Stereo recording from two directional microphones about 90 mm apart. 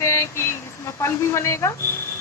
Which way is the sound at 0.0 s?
30° left (ahead or behind).